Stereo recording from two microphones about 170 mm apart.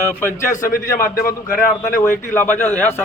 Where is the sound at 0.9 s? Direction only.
50° left (ahead or behind).